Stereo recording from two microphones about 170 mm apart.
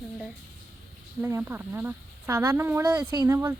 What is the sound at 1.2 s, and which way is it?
Speech, 10° right (ahead or behind).